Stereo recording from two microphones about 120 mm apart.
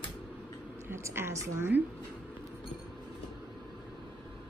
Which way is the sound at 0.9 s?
20° right (ahead or behind).